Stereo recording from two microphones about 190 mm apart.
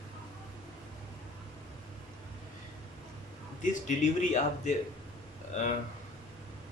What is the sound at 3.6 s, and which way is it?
Speech, 40° left (ahead or behind).